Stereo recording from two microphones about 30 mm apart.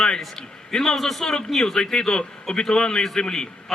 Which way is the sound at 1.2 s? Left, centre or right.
Left.